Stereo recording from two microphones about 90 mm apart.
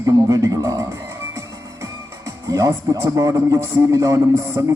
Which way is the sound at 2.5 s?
40° right (ahead or behind).